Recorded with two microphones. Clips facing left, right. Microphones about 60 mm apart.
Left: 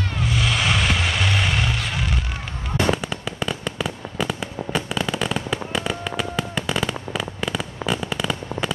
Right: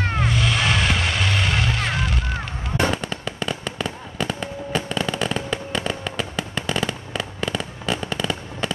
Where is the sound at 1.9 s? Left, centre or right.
Centre.